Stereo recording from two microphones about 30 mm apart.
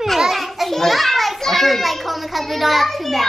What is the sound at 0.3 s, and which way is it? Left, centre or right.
Children playing, centre.